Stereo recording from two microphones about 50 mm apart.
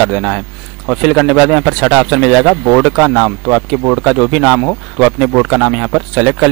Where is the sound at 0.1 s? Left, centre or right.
Centre.